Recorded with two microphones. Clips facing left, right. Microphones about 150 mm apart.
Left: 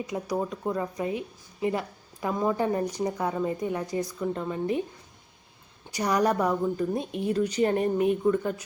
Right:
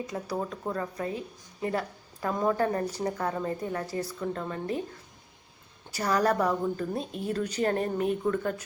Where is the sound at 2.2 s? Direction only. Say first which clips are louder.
Left 1 dB; 10° left (ahead or behind).